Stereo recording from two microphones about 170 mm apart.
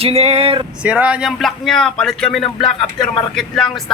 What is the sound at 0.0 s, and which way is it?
Speech, 40° right (ahead or behind).